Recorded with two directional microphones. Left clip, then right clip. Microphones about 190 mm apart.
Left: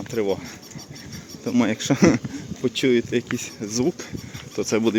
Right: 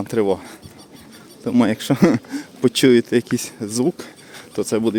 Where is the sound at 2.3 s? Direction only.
35° right (ahead or behind).